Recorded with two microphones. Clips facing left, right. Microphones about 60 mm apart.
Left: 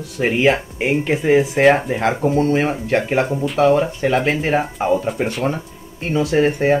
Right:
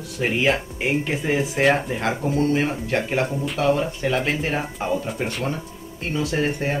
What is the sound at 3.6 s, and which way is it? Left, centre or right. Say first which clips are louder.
Speech: left 6 dB; centre.